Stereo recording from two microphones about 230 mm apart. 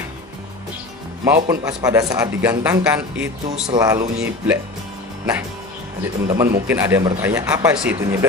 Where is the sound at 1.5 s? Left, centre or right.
Centre.